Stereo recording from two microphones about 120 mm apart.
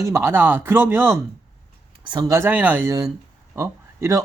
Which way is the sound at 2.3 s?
20° right (ahead or behind).